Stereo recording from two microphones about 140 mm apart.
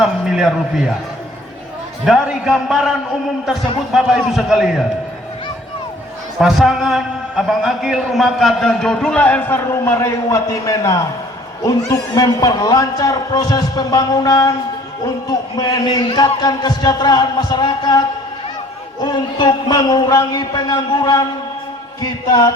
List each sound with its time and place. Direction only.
0.0 s a man's voice: 5° right (ahead or behind)
2.0 s a man's voice: 5° right (ahead or behind)
3.9 s a man's voice: 5° right (ahead or behind)
6.4 s a man's voice: centre (ahead or behind); by 18.0 s 30° left (ahead or behind)
19.0 s a man's voice: 30° left (ahead or behind)